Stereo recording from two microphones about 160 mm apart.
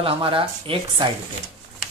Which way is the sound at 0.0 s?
35° right (ahead or behind).